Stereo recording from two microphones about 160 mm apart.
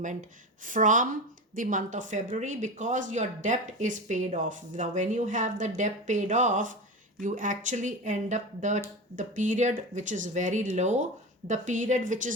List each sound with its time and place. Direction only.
0.0 s speech: 55° right (ahead or behind)